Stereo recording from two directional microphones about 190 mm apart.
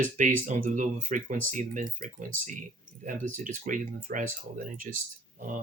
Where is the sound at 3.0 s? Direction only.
45° right (ahead or behind).